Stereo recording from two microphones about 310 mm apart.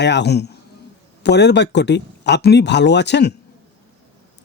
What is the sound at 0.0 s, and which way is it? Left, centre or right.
Speech, left.